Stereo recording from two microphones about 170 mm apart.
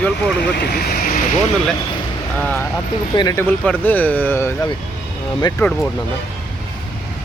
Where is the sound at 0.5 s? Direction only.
65° left (ahead or behind).